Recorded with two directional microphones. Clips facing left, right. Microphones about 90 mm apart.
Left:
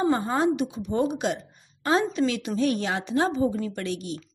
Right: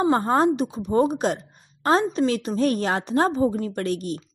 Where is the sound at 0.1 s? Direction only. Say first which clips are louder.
Right 4 dB; 45° right (ahead or behind).